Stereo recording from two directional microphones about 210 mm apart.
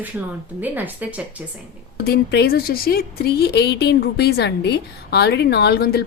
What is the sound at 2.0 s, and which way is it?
Speech, 50° left (ahead or behind).